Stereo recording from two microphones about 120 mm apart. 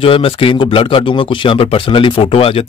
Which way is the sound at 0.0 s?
50° left (ahead or behind).